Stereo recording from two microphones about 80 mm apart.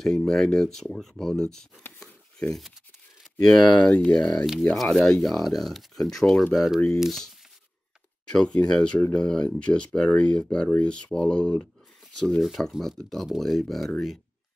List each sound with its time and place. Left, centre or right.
0.0 s speech: centre
1.8 s a sound: left
2.3 s speech: centre
8.3 s speech: centre